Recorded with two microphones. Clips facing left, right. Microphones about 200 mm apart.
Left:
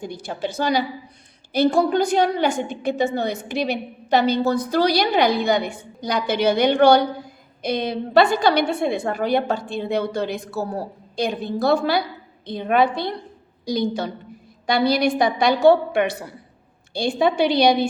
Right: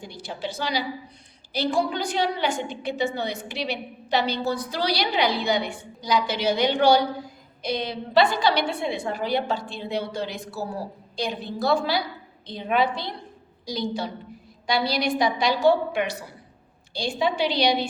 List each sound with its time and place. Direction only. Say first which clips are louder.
0.0 s a woman's voice: left 5 dB; 50° left (ahead or behind)